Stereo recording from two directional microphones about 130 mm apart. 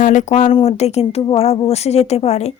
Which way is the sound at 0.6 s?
55° left (ahead or behind).